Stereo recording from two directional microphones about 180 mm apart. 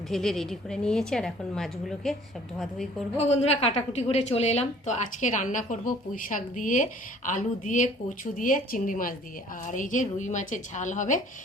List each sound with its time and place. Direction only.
0.1 s a woman's voice: centre (ahead or behind)
3.2 s a woman's voice: 35° left (ahead or behind)